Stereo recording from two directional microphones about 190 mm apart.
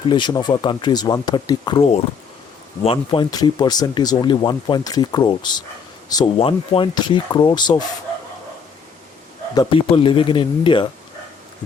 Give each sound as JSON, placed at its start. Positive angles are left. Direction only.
{"t": 0.1, "sound": "speech", "side_deg": 25}
{"t": 9.6, "sound": "speech", "side_deg": 25}